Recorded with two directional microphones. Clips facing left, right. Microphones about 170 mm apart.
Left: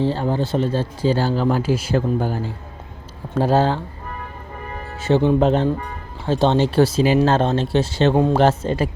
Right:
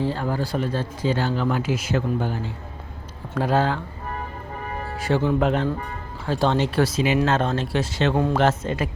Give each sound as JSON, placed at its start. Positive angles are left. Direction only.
{"t": 0.0, "sound": "speech", "side_deg": 30}
{"t": 3.3, "sound": "speech", "side_deg": 30}
{"t": 4.9, "sound": "speech", "side_deg": 25}